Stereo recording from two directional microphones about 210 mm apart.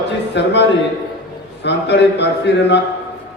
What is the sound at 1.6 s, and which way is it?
Speech, 55° left (ahead or behind).